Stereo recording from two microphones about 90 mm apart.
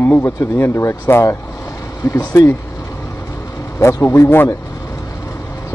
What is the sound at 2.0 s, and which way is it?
Speech, 40° left (ahead or behind).